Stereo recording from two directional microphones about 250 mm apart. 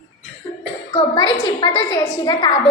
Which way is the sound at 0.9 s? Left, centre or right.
Centre.